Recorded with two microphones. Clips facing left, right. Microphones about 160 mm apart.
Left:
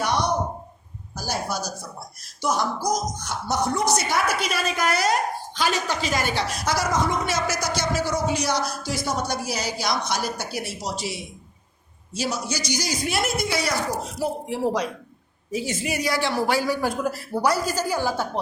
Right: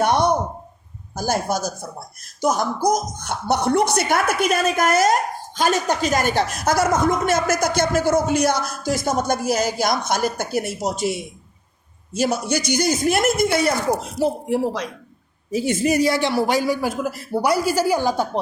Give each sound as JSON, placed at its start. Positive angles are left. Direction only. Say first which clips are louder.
{"t": 0.0, "sound": "a sound", "louder": "right 6 dB", "side_deg": -55}
{"t": 1.1, "sound": "speech", "louder": "right 6 dB", "side_deg": -50}
{"t": 15.8, "sound": "speech", "louder": "right 9 dB", "side_deg": -40}
{"t": 16.0, "sound": "music", "louder": "right 5 dB", "side_deg": -25}
{"t": 16.3, "sound": "a woman's voice", "louder": "right 3 dB", "side_deg": -15}